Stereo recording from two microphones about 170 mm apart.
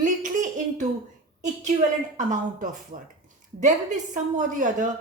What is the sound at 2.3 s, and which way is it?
A woman's voice, 50° right (ahead or behind).